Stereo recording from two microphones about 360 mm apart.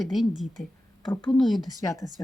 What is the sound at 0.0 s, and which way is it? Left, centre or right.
Speech, centre.